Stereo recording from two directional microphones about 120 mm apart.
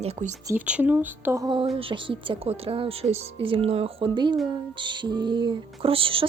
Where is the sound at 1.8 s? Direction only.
45° right (ahead or behind).